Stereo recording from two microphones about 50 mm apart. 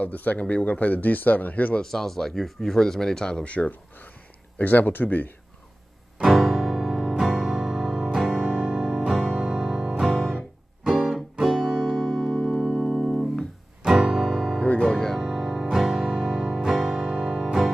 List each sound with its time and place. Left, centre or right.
0.0 s speech: left
1.8 s speech: centre
3.4 s speech: left
6.1 s music: centre
9.8 s music: centre
13.8 s music: centre
14.2 s music: centre
14.8 s music: centre
15.2 s music: centre